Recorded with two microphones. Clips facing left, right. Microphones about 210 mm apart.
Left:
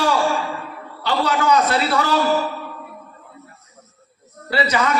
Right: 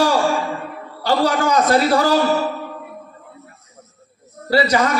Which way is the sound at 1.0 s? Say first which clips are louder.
Right 2 dB; 40° right (ahead or behind).